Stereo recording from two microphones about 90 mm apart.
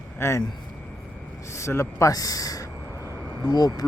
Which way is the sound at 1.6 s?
35° left (ahead or behind).